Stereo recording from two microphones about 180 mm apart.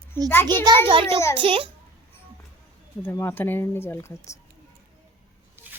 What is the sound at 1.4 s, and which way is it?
Speech, 30° right (ahead or behind).